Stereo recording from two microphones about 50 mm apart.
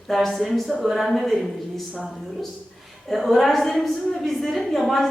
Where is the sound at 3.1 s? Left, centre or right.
Centre.